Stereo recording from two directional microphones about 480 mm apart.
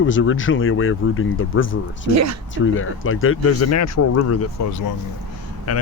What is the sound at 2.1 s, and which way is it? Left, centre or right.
Speech, right.